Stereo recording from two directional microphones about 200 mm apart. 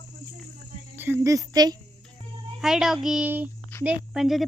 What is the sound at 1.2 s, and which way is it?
Speech, 15° right (ahead or behind).